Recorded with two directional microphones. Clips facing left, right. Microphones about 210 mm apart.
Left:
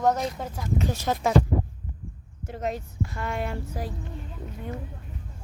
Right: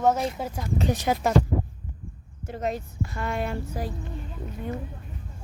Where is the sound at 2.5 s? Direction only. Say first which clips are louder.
Right 1 dB; 30° right (ahead or behind).